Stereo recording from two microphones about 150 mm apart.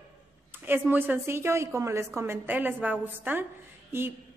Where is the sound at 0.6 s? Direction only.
15° right (ahead or behind).